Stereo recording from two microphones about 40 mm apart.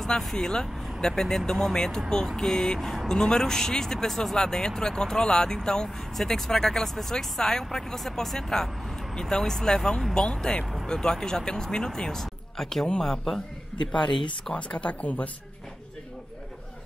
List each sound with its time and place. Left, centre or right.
0.2 s a woman's voice: centre
14.5 s speech: left